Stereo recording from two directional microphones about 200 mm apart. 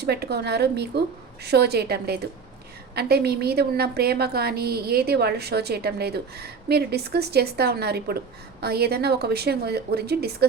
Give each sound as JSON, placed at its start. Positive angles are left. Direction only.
{"t": 0.0, "sound": "a woman's voice", "side_deg": -55}